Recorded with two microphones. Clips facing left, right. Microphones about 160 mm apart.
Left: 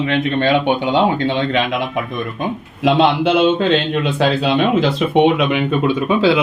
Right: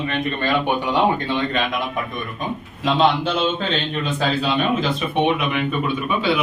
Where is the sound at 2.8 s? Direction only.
70° left (ahead or behind).